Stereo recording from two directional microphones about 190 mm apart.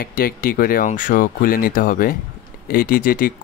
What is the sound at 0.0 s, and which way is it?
Speech, 50° left (ahead or behind).